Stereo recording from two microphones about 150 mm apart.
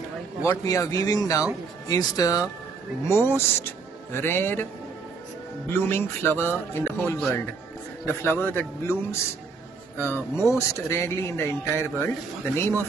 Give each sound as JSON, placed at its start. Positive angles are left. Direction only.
{"t": 0.4, "sound": "speech", "side_deg": 20}
{"t": 5.7, "sound": "speech", "side_deg": 15}
{"t": 9.9, "sound": "speech", "side_deg": 15}